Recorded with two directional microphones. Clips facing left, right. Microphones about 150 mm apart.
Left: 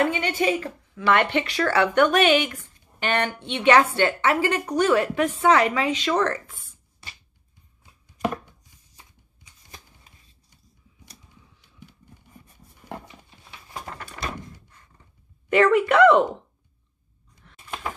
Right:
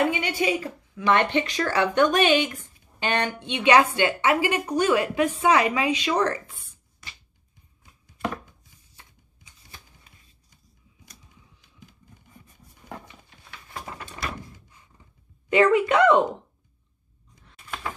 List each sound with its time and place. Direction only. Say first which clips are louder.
0.0 s a woman's voice: left 1 dB; 15° right (ahead or behind)
7.0 s music: left 1 dB; 30° left (ahead or behind)
15.5 s speech: left 1 dB; 20° right (ahead or behind)
17.6 s a sound: left 1 dB; 15° left (ahead or behind)